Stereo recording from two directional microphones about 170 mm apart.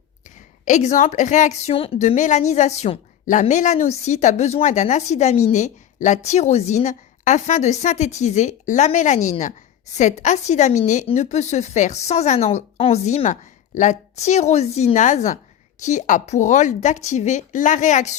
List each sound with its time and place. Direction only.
0.6 s speech: 45° left (ahead or behind)